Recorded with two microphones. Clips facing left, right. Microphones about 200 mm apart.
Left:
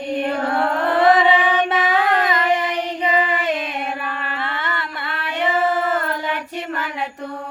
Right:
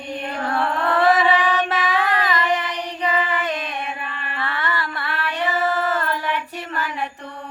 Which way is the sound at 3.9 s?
70° left (ahead or behind).